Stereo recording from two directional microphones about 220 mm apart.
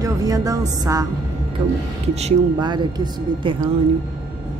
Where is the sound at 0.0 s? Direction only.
15° right (ahead or behind).